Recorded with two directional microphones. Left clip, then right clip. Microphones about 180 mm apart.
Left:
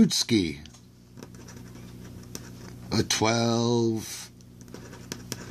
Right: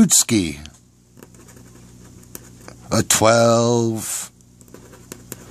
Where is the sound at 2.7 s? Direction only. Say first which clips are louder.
Right 8 dB; 50° right (ahead or behind).